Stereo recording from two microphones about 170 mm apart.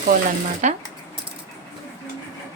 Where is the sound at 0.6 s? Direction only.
45° right (ahead or behind).